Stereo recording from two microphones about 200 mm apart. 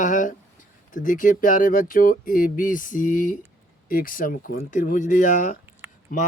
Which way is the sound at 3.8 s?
45° left (ahead or behind).